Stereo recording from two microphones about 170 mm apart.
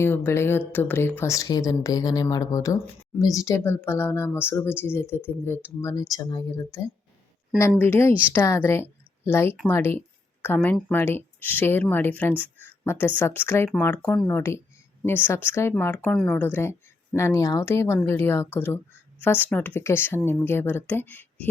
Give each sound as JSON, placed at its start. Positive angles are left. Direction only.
{"t": 0.0, "sound": "a woman's voice", "side_deg": 15}
{"t": 12.3, "sound": "speech", "side_deg": -10}
{"t": 12.8, "sound": "speech", "side_deg": 15}